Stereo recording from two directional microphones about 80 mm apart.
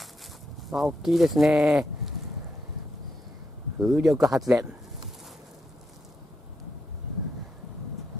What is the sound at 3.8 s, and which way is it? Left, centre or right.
Speech, centre.